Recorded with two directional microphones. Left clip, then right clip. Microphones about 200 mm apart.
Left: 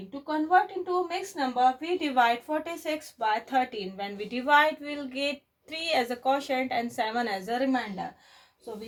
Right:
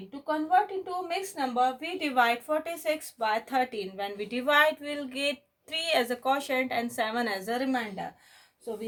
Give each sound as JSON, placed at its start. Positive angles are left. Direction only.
{"t": 0.3, "sound": "speech", "side_deg": -50}